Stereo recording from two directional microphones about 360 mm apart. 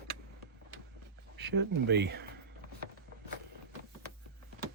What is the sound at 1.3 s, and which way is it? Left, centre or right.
Speech, right.